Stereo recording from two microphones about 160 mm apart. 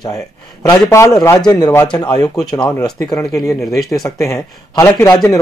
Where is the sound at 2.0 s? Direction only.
25° left (ahead or behind).